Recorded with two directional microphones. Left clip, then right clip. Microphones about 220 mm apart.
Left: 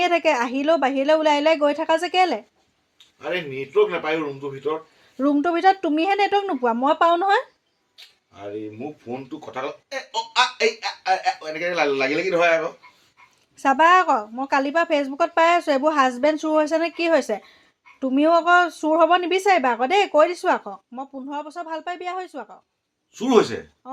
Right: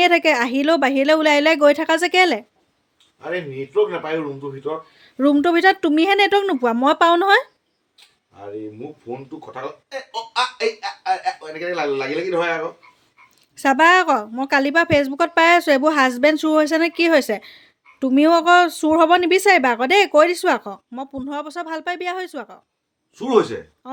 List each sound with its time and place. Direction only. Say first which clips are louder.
0.0 s speech: right 4 dB; 30° right (ahead or behind)
3.2 s speech: right 1 dB; 10° right (ahead or behind)
5.1 s speech: right 4 dB; 35° right (ahead or behind)
9.5 s speech: left 1 dB; 10° right (ahead or behind)
13.6 s a woman's voice: right 2 dB; 30° right (ahead or behind)
23.1 s speech: right 1 dB; centre (ahead or behind)